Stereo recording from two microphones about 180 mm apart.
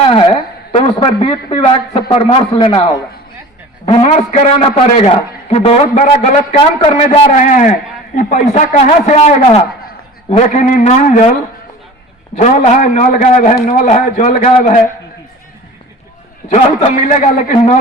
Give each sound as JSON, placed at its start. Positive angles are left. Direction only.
{"t": 0.0, "sound": "a woman's voice", "side_deg": 30}
{"t": 3.8, "sound": "a man's voice", "side_deg": 30}
{"t": 6.6, "sound": "a man's voice", "side_deg": 30}
{"t": 7.3, "sound": "a man's voice", "side_deg": 45}
{"t": 12.4, "sound": "a man's voice", "side_deg": 40}
{"t": 16.5, "sound": "a man's voice", "side_deg": 35}